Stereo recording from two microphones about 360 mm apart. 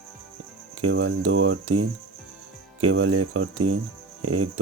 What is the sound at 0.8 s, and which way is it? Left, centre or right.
Speech, right.